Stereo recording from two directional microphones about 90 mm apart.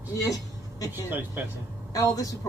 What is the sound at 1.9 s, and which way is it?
Speech, 40° left (ahead or behind).